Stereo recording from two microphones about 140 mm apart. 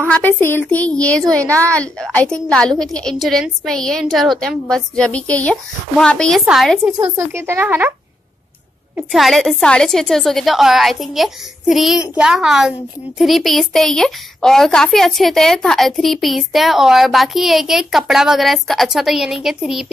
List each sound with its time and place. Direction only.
0.1 s a woman's voice: 15° left (ahead or behind)
7.2 s speech: 20° right (ahead or behind)
8.9 s a woman's voice: centre (ahead or behind)